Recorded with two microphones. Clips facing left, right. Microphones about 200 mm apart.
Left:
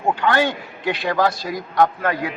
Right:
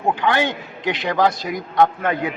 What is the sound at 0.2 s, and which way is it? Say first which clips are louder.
A man's voice: left 1 dB; 15° right (ahead or behind).